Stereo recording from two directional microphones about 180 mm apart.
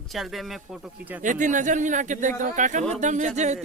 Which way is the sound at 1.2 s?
45° right (ahead or behind).